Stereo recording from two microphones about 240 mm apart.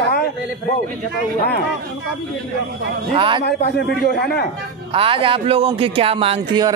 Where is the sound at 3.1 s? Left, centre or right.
Right.